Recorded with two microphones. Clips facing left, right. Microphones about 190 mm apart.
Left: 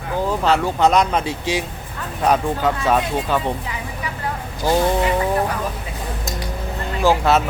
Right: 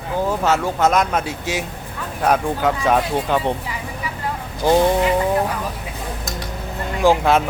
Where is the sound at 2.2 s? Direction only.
10° right (ahead or behind).